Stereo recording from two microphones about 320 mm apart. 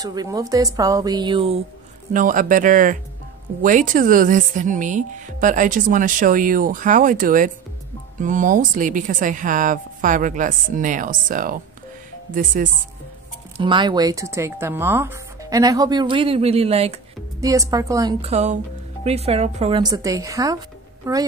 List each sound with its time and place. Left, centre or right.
0.0 s a woman's voice: centre
13.6 s speech: centre